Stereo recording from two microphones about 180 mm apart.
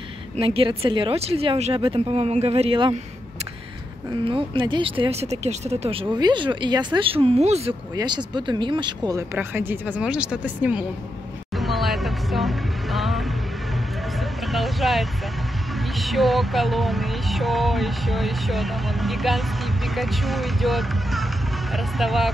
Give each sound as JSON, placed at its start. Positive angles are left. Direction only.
{"t": 0.4, "sound": "speech", "side_deg": -30}
{"t": 4.2, "sound": "speech", "side_deg": -30}
{"t": 7.9, "sound": "speech", "side_deg": -25}
{"t": 11.5, "sound": "a sound", "side_deg": 0}
{"t": 14.4, "sound": "speech", "side_deg": 0}
{"t": 16.0, "sound": "music", "side_deg": 0}
{"t": 19.9, "sound": "speech", "side_deg": 0}
{"t": 21.7, "sound": "music", "side_deg": 0}